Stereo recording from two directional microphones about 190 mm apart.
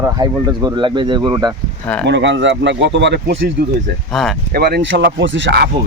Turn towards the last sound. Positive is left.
turn(degrees=-65)  # may be behind; listen again after turning